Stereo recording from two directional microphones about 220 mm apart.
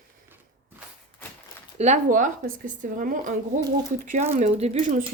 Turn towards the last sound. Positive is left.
turn(degrees=-30)  # may be behind; listen again after turning